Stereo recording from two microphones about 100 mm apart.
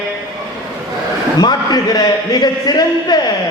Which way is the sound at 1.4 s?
45° left (ahead or behind).